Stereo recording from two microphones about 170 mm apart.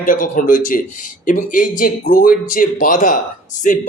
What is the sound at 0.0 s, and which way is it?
A man's voice, 55° left (ahead or behind).